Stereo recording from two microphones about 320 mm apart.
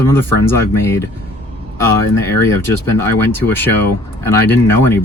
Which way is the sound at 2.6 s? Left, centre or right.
Centre.